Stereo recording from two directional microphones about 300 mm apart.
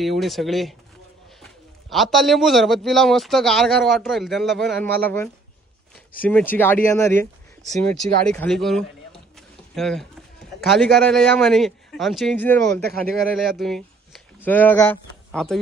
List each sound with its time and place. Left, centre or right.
0.0 s a man's voice: centre